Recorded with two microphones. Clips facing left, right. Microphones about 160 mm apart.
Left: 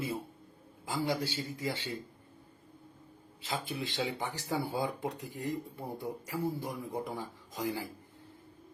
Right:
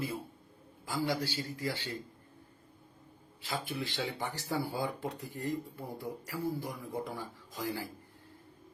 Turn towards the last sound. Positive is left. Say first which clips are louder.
# left 2 dB
turn(degrees=20)  # may be behind; listen again after turning